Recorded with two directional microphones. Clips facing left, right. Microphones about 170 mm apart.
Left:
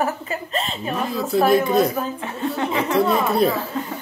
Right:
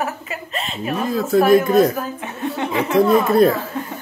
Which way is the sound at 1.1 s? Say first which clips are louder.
Right 4 dB; 50° right (ahead or behind).